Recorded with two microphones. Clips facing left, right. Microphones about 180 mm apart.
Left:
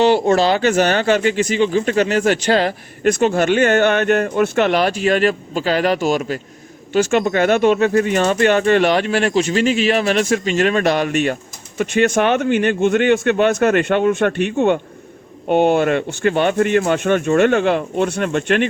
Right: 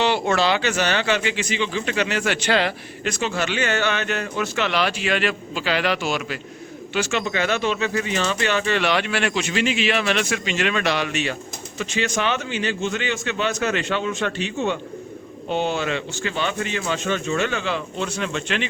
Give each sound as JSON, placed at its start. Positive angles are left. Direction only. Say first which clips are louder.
{"t": 0.0, "sound": "speech", "louder": "left 7 dB", "side_deg": 45}